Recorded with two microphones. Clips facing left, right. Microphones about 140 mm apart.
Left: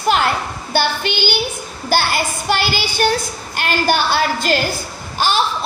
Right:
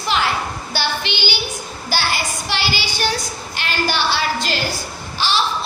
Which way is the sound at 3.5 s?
50° left (ahead or behind).